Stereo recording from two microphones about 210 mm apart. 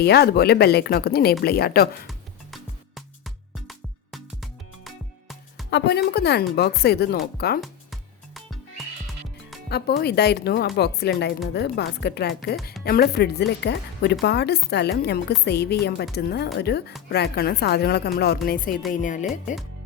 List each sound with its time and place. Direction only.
0.0 s speech: 50° left (ahead or behind)
2.0 s music: centre (ahead or behind)
5.7 s speech: 50° left (ahead or behind)
7.6 s music: centre (ahead or behind)
9.6 s speech: 50° left (ahead or behind)